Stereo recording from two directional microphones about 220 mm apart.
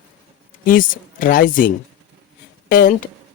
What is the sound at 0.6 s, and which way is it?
Speech, 40° left (ahead or behind).